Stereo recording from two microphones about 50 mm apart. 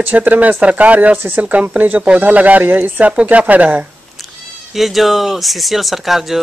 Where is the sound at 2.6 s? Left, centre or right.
Right.